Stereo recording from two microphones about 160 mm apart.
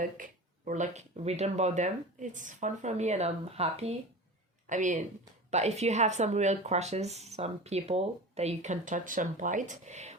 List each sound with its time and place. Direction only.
0.0 s speech: 55° right (ahead or behind)
4.7 s speech: 50° right (ahead or behind)